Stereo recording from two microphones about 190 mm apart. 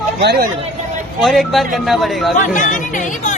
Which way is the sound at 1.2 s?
Centre (ahead or behind).